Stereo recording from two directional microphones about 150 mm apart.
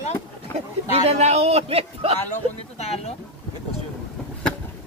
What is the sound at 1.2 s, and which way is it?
Speech, 45° right (ahead or behind).